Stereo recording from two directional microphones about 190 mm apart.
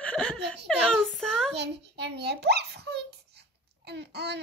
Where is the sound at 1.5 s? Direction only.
65° right (ahead or behind).